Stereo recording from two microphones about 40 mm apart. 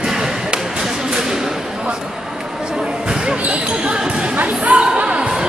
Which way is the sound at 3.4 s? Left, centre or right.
Right.